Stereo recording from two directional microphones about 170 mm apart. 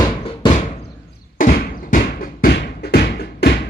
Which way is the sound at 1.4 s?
65° left (ahead or behind).